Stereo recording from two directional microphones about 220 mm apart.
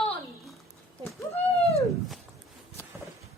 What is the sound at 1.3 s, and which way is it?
Speech, 30° left (ahead or behind).